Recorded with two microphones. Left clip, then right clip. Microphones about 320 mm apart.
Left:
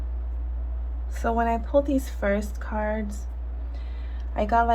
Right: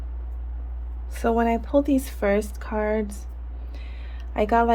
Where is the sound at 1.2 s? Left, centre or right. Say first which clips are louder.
Right 2 dB; right.